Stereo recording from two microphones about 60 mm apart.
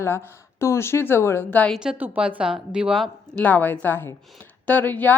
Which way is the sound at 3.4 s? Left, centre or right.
Left.